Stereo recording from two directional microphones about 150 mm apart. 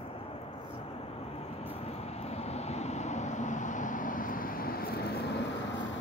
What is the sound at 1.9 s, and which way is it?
Vehicle, 45° left (ahead or behind).